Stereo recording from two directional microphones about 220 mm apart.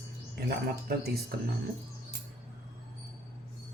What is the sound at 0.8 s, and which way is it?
Speech, 45° right (ahead or behind).